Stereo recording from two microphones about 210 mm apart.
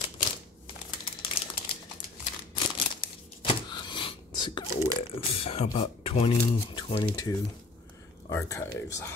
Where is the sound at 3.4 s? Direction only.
25° left (ahead or behind).